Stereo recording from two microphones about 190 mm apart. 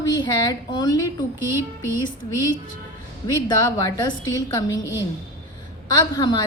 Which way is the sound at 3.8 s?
20° left (ahead or behind).